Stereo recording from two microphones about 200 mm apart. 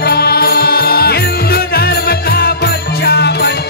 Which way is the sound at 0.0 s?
50° left (ahead or behind).